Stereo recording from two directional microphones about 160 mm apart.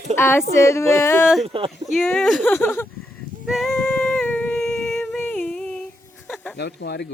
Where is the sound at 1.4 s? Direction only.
35° right (ahead or behind).